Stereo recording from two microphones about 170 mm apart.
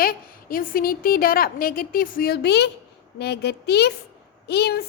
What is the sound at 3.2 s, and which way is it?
Speech, 75° left (ahead or behind).